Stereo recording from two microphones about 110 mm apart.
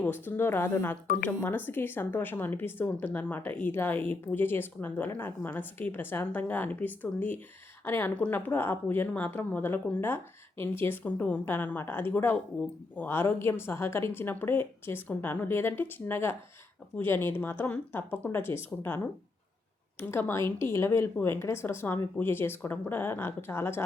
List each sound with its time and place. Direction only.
0.0 s speech: 20° left (ahead or behind)